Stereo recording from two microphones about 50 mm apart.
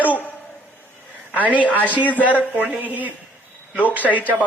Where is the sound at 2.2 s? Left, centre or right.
Right.